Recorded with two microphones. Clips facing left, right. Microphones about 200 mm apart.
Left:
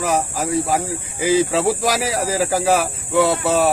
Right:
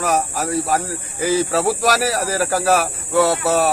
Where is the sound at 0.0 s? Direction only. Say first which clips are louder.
Even; 10° left (ahead or behind).